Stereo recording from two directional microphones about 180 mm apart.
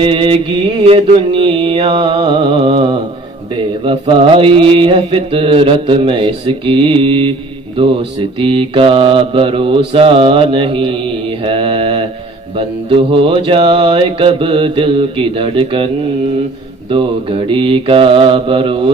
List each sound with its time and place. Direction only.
0.0 s mantra: 30° right (ahead or behind)
16.9 s mantra: 30° right (ahead or behind)